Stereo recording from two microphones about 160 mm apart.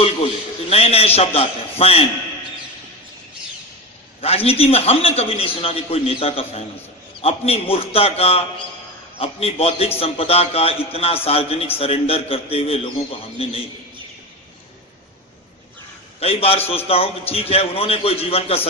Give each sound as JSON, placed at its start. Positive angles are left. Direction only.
{"t": 0.7, "sound": "a man's voice", "side_deg": 40}
{"t": 4.2, "sound": "a man's voice", "side_deg": 40}
{"t": 16.2, "sound": "a man's voice", "side_deg": 40}